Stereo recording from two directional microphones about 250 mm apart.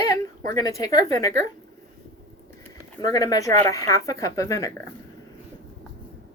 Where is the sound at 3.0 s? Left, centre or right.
Centre.